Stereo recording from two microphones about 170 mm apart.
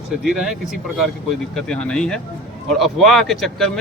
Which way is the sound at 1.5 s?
5° left (ahead or behind).